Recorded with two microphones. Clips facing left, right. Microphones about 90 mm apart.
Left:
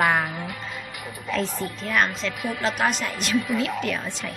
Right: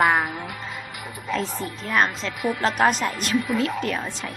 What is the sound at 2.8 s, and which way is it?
Speech, 40° right (ahead or behind).